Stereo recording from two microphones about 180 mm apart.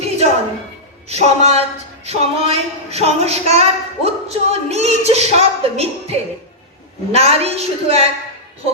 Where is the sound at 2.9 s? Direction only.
35° right (ahead or behind).